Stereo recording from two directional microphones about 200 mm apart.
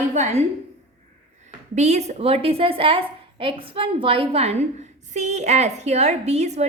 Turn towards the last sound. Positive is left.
turn(degrees=-35)  # may be behind; listen again after turning